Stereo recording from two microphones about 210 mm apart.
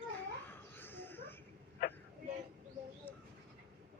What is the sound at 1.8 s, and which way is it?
Vehicle, 45° left (ahead or behind).